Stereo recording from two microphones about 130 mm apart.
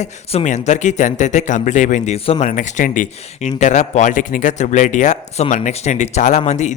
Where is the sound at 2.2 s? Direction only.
50° left (ahead or behind).